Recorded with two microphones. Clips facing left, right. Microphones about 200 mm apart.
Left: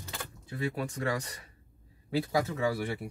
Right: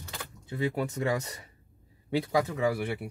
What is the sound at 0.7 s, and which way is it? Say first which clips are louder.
Speech: right 2 dB; 25° right (ahead or behind).